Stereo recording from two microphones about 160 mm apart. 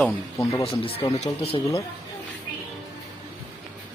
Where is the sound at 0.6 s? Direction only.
35° left (ahead or behind).